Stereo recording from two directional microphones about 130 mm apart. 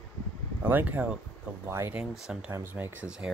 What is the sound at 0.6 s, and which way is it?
Speech, 15° right (ahead or behind).